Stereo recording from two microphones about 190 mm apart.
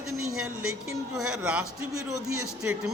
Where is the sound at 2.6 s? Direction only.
5° right (ahead or behind).